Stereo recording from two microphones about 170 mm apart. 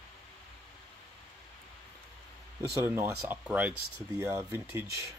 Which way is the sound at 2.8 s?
10° right (ahead or behind).